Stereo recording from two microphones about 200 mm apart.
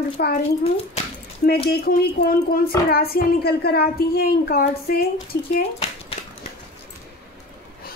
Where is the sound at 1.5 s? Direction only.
50° left (ahead or behind).